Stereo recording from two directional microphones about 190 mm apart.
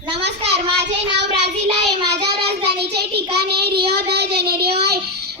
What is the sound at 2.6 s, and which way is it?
A child's voice, 60° right (ahead or behind).